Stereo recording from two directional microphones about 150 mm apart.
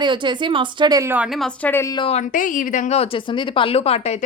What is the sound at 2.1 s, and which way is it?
Speech, 55° left (ahead or behind).